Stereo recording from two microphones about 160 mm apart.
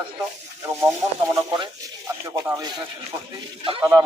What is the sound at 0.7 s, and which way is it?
Speech, 15° right (ahead or behind).